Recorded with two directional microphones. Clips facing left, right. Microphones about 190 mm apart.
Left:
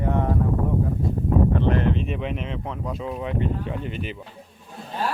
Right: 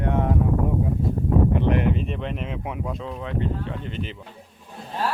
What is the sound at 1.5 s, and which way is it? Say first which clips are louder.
Speech: even; 15° right (ahead or behind).